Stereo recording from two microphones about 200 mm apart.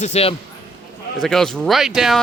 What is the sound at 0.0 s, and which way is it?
Speech, 30° left (ahead or behind).